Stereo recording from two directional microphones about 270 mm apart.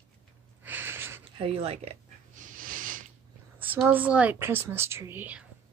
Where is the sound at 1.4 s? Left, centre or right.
Right.